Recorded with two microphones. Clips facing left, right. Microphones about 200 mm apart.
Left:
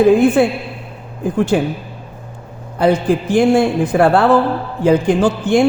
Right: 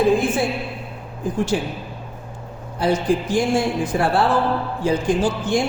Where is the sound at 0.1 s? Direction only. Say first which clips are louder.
Left 8 dB; 60° left (ahead or behind).